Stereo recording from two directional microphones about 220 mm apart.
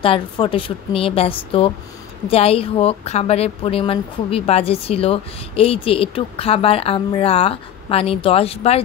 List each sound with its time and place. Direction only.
0.0 s a woman's voice: 25° left (ahead or behind)